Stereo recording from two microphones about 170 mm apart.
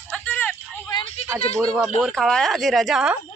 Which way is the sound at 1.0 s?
35° left (ahead or behind).